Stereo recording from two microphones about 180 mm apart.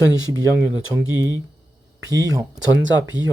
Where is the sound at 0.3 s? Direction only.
15° right (ahead or behind).